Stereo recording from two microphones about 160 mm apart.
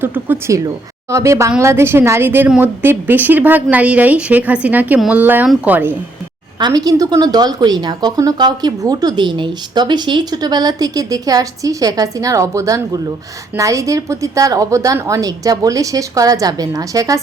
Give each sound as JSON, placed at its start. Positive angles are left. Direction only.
{"t": 0.0, "sound": "speech", "side_deg": -15}
{"t": 6.6, "sound": "a woman's voice", "side_deg": -25}